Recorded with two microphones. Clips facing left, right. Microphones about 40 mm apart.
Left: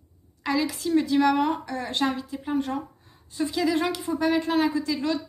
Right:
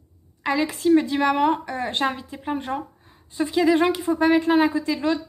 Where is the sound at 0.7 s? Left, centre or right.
Right.